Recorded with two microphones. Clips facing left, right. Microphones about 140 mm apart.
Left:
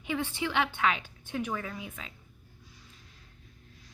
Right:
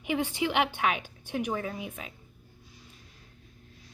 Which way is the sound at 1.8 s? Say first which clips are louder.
Right 4 dB; 15° right (ahead or behind).